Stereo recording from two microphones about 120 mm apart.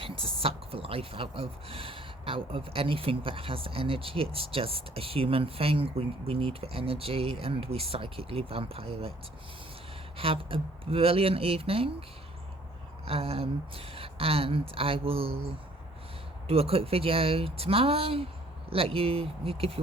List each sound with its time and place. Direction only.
0.0 s speech: 50° right (ahead or behind)
10.2 s speech: 50° right (ahead or behind)
13.1 s speech: 55° right (ahead or behind)
16.5 s speech: 55° right (ahead or behind)